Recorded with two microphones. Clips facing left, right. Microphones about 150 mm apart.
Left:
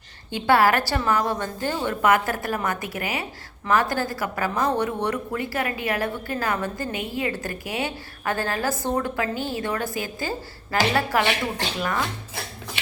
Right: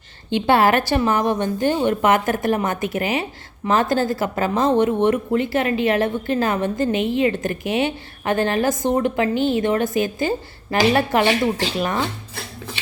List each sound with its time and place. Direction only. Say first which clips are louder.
0.3 s speech: right 3 dB; 25° right (ahead or behind)